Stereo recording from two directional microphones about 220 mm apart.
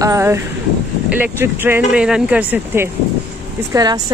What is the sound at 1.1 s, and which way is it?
Speech, 10° right (ahead or behind).